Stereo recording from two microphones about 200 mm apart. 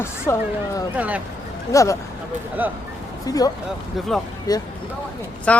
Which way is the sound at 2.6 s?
10° right (ahead or behind).